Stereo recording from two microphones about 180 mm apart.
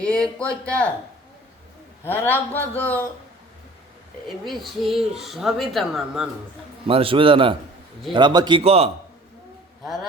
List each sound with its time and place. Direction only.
0.0 s speech: 5° left (ahead or behind)
2.0 s speech: 10° left (ahead or behind)
4.3 s speech: centre (ahead or behind)
6.8 s speech: 30° right (ahead or behind)
9.8 s speech: centre (ahead or behind)